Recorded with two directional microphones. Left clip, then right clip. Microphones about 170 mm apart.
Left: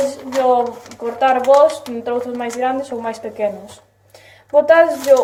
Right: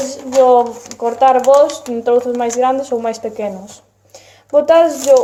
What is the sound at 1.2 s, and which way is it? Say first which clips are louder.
Speech: right 2 dB; 50° right (ahead or behind).